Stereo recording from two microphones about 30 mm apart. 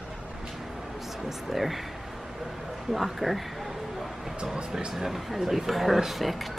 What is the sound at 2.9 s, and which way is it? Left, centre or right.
Speech, centre.